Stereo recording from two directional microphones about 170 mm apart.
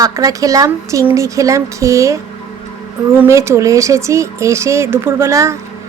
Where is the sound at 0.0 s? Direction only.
20° right (ahead or behind).